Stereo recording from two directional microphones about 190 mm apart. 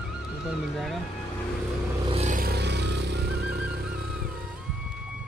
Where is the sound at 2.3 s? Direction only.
55° right (ahead or behind).